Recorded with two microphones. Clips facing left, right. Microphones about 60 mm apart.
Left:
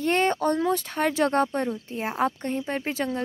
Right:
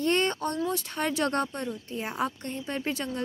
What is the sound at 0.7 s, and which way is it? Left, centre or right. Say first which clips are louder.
Speech: left 5 dB; left.